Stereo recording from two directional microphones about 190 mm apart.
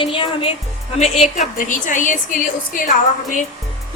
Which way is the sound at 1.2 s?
40° left (ahead or behind).